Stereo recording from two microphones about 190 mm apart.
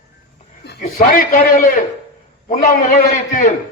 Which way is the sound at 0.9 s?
50° left (ahead or behind).